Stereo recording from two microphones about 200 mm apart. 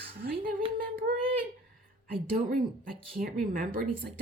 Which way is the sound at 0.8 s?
45° right (ahead or behind).